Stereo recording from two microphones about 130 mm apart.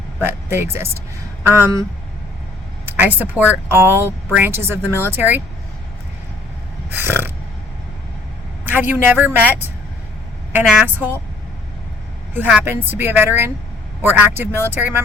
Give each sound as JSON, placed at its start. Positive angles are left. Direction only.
{"t": 0.2, "sound": "speech", "side_deg": -15}
{"t": 2.8, "sound": "speech", "side_deg": -15}
{"t": 6.9, "sound": "a sound", "side_deg": -15}
{"t": 8.6, "sound": "speech", "side_deg": -15}
{"t": 12.5, "sound": "speech", "side_deg": -10}